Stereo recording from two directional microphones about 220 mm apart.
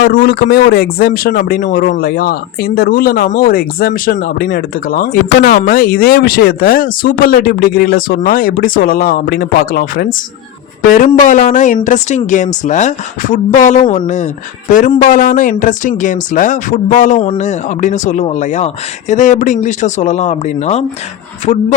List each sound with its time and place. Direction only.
0.0 s speech: 45° left (ahead or behind)